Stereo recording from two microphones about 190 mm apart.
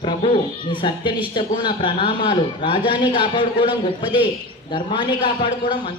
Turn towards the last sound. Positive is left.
turn(degrees=25)  # may be behind; listen again after turning